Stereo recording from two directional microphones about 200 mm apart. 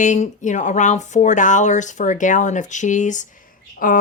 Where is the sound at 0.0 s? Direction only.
40° left (ahead or behind).